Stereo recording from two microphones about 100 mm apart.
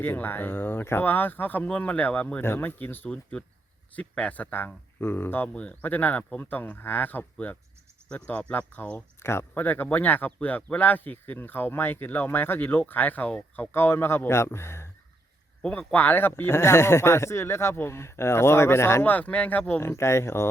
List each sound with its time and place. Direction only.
0.0 s speech: 20° left (ahead or behind)
9.2 s speech: 25° left (ahead or behind)
15.6 s speech: 10° left (ahead or behind)
19.1 s speech: 15° left (ahead or behind)
19.9 s speech: 30° left (ahead or behind)